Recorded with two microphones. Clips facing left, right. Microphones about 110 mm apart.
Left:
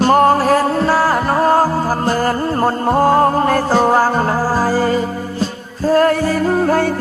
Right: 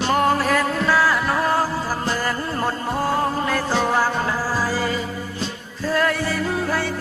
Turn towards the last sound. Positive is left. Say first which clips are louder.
# left 9 dB
turn(degrees=45)  # may be behind; listen again after turning